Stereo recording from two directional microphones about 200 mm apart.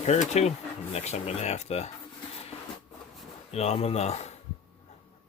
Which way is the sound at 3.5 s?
30° left (ahead or behind).